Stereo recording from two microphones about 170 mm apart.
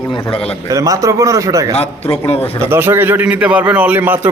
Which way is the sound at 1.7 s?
35° left (ahead or behind).